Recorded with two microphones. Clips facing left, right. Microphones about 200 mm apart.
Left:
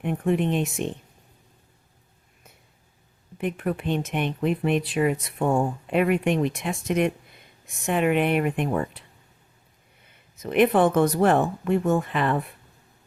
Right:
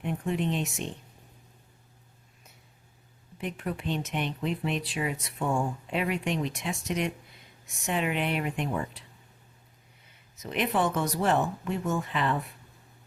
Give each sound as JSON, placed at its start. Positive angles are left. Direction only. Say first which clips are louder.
{"t": 0.0, "sound": "speech", "louder": "left 6 dB", "side_deg": 55}
{"t": 3.3, "sound": "speech", "louder": "left 7 dB", "side_deg": 55}
{"t": 10.3, "sound": "speech", "louder": "left 9 dB", "side_deg": 55}